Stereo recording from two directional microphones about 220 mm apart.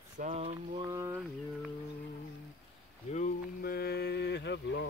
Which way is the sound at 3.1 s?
40° left (ahead or behind).